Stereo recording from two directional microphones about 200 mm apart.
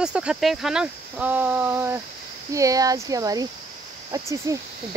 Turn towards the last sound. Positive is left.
turn(degrees=-15)  # may be behind; listen again after turning